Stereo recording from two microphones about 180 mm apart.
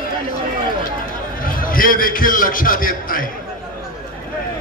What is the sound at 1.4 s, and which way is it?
A man's voice, 50° left (ahead or behind).